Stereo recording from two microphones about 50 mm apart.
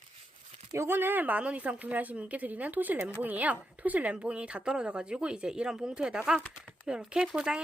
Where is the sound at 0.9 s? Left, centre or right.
Right.